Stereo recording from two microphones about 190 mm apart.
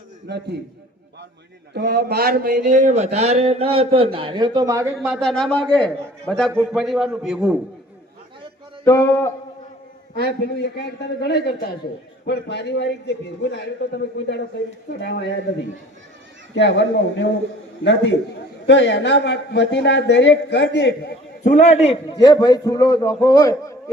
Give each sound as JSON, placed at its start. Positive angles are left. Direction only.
{"t": 0.3, "sound": "a man's voice", "side_deg": -60}
{"t": 1.7, "sound": "a man's voice", "side_deg": -60}
{"t": 4.9, "sound": "a man's voice", "side_deg": 0}
{"t": 8.8, "sound": "speech", "side_deg": 15}
{"t": 10.2, "sound": "a man's voice", "side_deg": 55}
{"t": 16.6, "sound": "a man's voice", "side_deg": 70}
{"t": 21.4, "sound": "a man's voice", "side_deg": 40}
{"t": 22.3, "sound": "a man's voice", "side_deg": 20}